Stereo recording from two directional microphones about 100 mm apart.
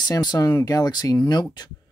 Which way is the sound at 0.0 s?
45° left (ahead or behind).